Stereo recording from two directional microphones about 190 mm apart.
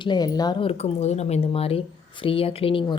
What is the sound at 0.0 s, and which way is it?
Speech, 20° left (ahead or behind).